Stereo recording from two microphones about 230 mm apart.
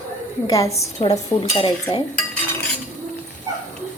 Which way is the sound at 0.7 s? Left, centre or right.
Left.